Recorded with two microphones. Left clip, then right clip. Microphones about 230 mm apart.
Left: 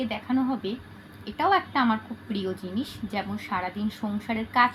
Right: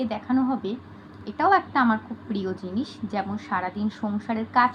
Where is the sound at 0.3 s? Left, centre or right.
Centre.